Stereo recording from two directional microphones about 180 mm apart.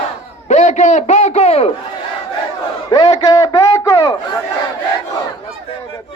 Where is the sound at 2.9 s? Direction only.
20° left (ahead or behind).